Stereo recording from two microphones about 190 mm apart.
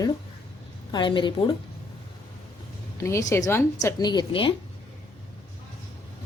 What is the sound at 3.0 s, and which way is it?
A woman's voice, 15° left (ahead or behind).